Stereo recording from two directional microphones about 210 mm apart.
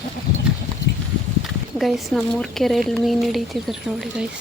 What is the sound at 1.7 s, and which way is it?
Speech, centre (ahead or behind).